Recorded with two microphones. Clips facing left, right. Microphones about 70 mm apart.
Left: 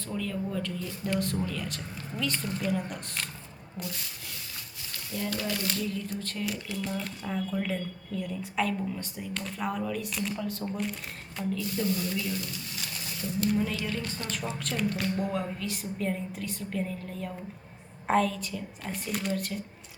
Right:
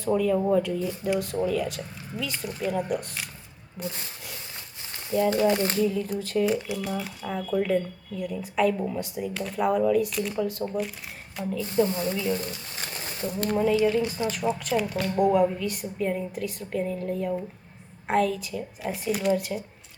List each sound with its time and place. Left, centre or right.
0.5 s a woman's voice: centre
3.8 s speech: right
5.1 s speech: right
5.7 s a woman's voice: centre
6.4 s speech: right
6.8 s a woman's voice: centre
11.6 s speech: right
13.6 s a woman's voice: centre